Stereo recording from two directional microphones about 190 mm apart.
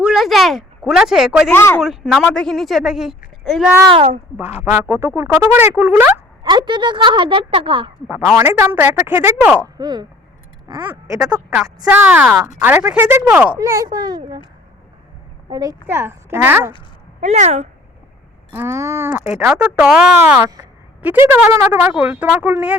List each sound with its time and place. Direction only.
0.0 s a woman's voice: centre (ahead or behind)
1.5 s speech: 10° left (ahead or behind)
1.8 s speech: centre (ahead or behind)
3.9 s a woman's voice: 30° right (ahead or behind)
4.6 s speech: 10° right (ahead or behind)
6.4 s a woman's voice: 25° right (ahead or behind)
8.0 s speech: 5° right (ahead or behind)
8.4 s speech: 15° right (ahead or behind)
9.7 s a woman's voice: 20° right (ahead or behind)
11.2 s speech: 5° right (ahead or behind)
13.6 s a woman's voice: 20° right (ahead or behind)
15.4 s speech: 20° right (ahead or behind)
17.2 s speech: 35° right (ahead or behind)
18.5 s speech: 15° right (ahead or behind)